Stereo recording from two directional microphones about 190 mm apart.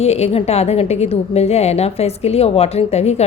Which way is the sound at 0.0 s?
35° left (ahead or behind).